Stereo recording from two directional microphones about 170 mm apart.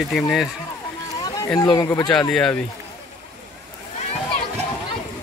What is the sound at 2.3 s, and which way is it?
Speech, 5° left (ahead or behind).